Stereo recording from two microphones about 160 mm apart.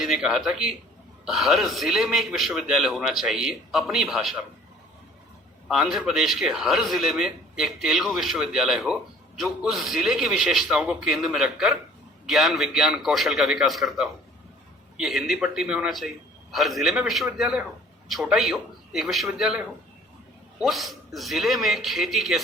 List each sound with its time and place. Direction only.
0.0 s a man's voice: centre (ahead or behind)
5.6 s a man's voice: 5° right (ahead or behind)